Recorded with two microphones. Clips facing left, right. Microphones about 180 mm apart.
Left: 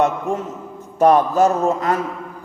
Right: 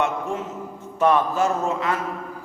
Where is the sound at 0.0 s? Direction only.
40° left (ahead or behind).